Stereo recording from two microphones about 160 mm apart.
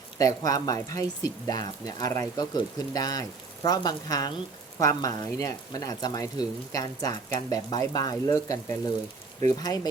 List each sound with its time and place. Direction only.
0.2 s speech: 20° left (ahead or behind)